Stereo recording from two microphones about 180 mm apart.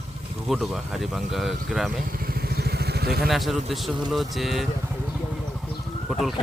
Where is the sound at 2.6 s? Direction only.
60° right (ahead or behind).